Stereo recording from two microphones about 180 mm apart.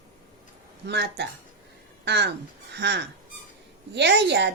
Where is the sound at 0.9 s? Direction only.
70° right (ahead or behind).